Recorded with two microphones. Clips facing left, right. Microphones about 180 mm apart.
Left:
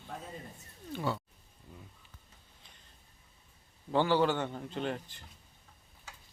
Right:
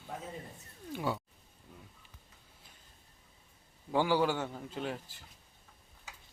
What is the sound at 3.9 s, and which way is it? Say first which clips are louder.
A man's voice: left 1 dB; 10° right (ahead or behind).